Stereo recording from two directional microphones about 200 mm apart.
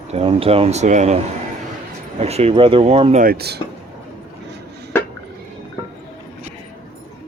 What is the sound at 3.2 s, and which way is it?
Speech, 50° right (ahead or behind).